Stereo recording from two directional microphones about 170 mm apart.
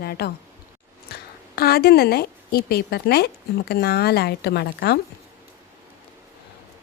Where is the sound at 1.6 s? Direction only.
65° left (ahead or behind).